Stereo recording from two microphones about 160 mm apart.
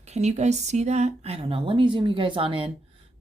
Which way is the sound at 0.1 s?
45° right (ahead or behind).